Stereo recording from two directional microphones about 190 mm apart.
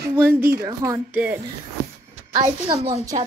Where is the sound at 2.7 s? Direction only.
30° right (ahead or behind).